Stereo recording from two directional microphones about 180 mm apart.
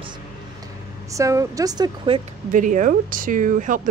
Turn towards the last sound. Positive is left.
turn(degrees=-45)  # may be behind; listen again after turning